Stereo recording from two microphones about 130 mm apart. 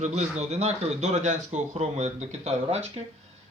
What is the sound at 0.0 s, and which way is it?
A man's voice, 60° right (ahead or behind).